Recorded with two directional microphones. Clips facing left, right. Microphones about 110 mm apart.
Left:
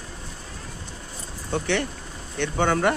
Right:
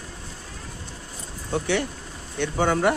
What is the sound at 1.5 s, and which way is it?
Speech, 10° right (ahead or behind).